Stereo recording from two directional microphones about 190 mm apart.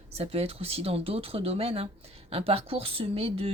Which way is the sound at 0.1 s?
30° right (ahead or behind).